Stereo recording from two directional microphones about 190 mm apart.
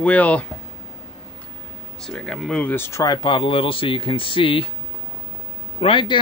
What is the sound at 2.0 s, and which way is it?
Speech, 5° left (ahead or behind).